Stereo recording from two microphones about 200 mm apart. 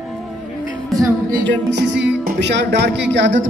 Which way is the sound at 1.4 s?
60° right (ahead or behind).